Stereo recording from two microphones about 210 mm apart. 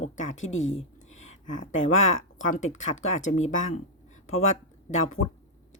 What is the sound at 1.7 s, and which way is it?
Speech, 70° left (ahead or behind).